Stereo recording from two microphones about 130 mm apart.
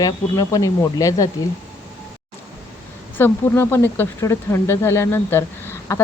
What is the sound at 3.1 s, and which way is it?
Speech, 15° left (ahead or behind).